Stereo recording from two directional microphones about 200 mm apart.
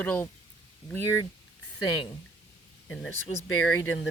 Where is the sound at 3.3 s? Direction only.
30° left (ahead or behind).